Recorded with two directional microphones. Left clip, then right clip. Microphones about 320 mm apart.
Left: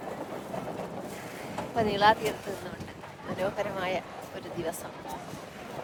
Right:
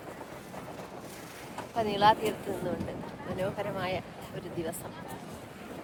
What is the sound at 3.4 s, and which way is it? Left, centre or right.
Speech, centre.